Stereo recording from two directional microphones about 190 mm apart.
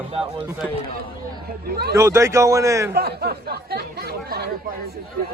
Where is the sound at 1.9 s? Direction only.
15° right (ahead or behind).